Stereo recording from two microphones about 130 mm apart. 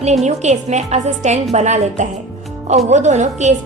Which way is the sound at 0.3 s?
60° right (ahead or behind).